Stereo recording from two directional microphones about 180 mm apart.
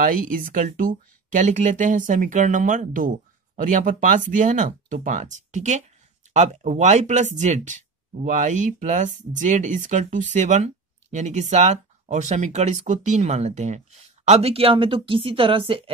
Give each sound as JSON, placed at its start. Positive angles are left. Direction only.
{"t": 0.0, "sound": "speech", "side_deg": -50}